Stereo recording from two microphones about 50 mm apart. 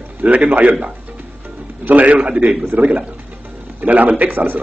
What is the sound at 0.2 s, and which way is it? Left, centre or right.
Speech, right.